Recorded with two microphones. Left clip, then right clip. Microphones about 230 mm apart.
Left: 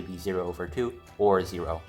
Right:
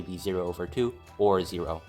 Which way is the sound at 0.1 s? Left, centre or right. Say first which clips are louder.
Even; right.